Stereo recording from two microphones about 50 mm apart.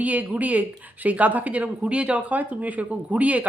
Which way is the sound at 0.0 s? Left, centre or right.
Right.